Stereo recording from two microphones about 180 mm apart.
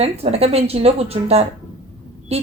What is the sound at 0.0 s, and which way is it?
A woman's voice, 35° right (ahead or behind).